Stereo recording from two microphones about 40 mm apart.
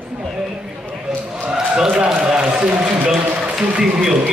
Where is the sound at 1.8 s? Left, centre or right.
Centre.